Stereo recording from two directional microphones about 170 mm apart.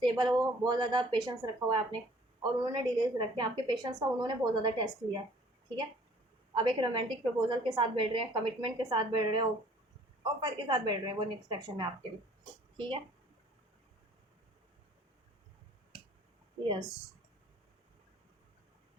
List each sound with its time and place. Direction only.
0.0 s a woman's voice: 25° right (ahead or behind)
6.6 s a woman's voice: 30° right (ahead or behind)
16.6 s a woman's voice: 25° right (ahead or behind)